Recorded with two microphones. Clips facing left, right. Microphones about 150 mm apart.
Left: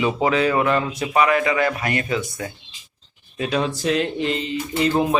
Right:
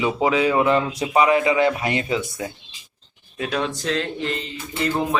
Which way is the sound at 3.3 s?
Centre (ahead or behind).